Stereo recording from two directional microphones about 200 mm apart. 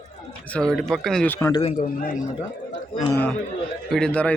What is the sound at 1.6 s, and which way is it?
Speech, 40° left (ahead or behind).